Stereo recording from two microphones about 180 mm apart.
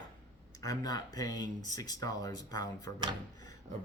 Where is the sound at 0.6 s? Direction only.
20° left (ahead or behind).